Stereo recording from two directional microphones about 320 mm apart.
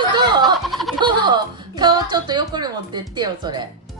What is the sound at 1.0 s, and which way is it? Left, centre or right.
Music, centre.